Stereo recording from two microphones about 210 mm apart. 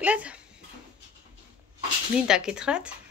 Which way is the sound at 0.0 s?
5° right (ahead or behind).